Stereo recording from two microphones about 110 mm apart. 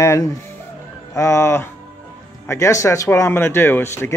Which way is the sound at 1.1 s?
25° left (ahead or behind).